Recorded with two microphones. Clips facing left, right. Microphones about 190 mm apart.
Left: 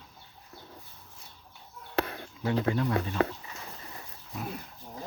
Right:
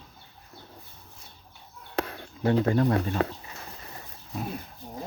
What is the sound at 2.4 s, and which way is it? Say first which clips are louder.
Speech: right 5 dB; 45° right (ahead or behind).